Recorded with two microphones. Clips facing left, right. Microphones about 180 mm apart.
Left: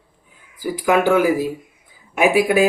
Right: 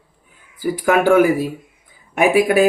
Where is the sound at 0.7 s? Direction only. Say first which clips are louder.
Right 2 dB; 50° right (ahead or behind).